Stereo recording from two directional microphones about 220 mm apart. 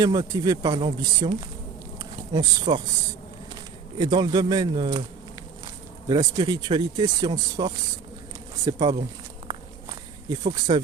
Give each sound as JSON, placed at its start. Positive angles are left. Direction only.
{"t": 0.0, "sound": "speech", "side_deg": -15}
{"t": 2.3, "sound": "speech", "side_deg": -20}
{"t": 6.1, "sound": "speech", "side_deg": -15}
{"t": 10.2, "sound": "speech", "side_deg": -15}